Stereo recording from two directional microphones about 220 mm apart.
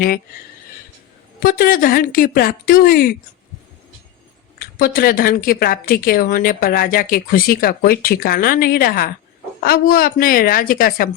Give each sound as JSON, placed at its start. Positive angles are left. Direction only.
{"t": 1.4, "sound": "speech", "side_deg": 40}
{"t": 4.6, "sound": "speech", "side_deg": 40}